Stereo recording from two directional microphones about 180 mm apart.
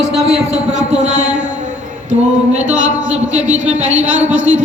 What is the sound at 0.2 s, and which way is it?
A man's voice, 35° right (ahead or behind).